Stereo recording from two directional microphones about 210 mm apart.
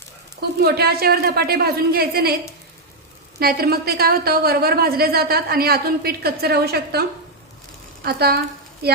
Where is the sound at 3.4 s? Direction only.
45° right (ahead or behind).